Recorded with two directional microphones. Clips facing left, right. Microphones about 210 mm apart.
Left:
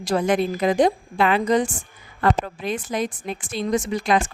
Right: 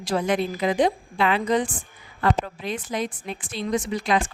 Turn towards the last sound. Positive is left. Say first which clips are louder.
# left 2 dB
turn(degrees=45)  # may be behind; listen again after turning